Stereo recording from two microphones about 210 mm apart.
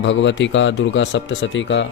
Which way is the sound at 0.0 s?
60° left (ahead or behind).